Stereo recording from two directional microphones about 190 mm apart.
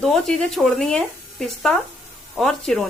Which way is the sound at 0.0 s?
Centre (ahead or behind).